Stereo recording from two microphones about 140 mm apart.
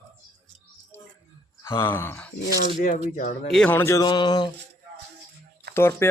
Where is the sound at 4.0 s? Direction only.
30° left (ahead or behind).